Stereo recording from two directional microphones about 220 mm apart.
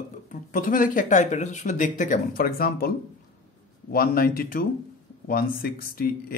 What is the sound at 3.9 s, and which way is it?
Speech, 40° left (ahead or behind).